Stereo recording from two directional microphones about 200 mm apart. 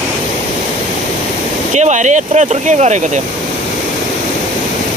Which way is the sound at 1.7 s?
35° right (ahead or behind).